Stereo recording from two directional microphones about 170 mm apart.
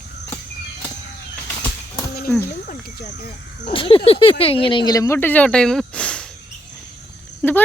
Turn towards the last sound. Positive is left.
turn(degrees=10)  # may be behind; listen again after turning